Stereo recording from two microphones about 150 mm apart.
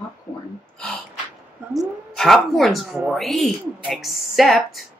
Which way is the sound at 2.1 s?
Centre (ahead or behind).